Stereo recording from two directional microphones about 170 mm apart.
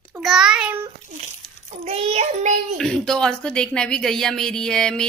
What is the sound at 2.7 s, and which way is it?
Speech, 5° left (ahead or behind).